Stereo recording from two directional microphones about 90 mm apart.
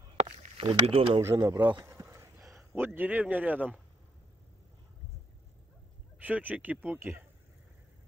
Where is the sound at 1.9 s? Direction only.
30° right (ahead or behind).